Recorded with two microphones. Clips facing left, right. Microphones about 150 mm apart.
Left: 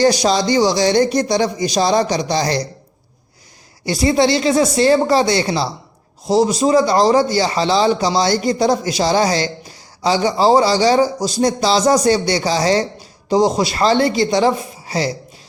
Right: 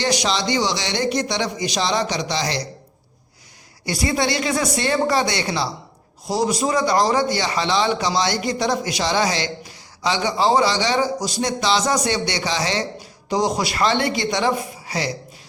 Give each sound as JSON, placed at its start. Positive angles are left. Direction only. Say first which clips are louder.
{"t": 0.0, "sound": "a man's voice", "louder": "left 7 dB", "side_deg": 35}
{"t": 3.8, "sound": "a woman's voice", "louder": "left 7 dB", "side_deg": 30}